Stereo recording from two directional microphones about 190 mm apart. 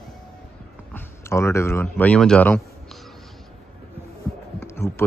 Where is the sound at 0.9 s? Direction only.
15° left (ahead or behind).